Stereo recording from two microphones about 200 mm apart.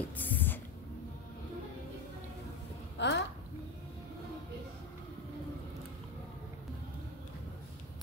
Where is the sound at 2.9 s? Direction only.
60° left (ahead or behind).